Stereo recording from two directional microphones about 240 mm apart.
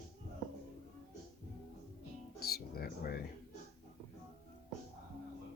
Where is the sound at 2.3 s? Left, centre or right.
Left.